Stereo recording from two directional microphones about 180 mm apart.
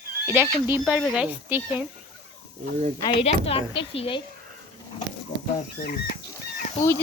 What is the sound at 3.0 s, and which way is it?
A woman's voice, 30° left (ahead or behind).